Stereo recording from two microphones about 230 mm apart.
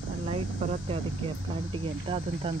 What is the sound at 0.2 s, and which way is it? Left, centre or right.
Speech, right.